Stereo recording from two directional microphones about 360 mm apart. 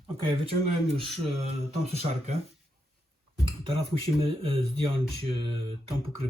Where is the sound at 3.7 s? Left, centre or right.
Centre.